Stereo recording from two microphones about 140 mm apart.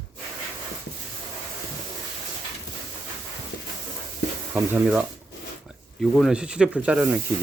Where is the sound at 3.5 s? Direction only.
90° left.